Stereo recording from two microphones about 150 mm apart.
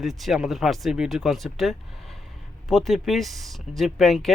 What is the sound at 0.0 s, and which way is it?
Speech, centre (ahead or behind).